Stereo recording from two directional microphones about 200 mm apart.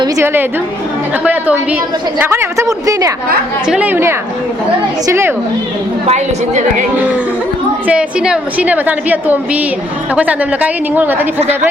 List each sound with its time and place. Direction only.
0.0 s a woman's voice: 15° right (ahead or behind)
6.1 s a woman's voice: 35° right (ahead or behind)
7.9 s a woman's voice: 5° right (ahead or behind)